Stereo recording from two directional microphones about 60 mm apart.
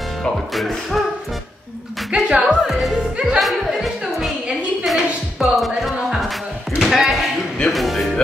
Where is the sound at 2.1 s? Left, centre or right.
Centre.